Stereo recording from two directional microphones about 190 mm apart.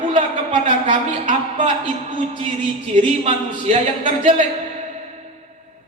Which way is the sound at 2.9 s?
40° right (ahead or behind).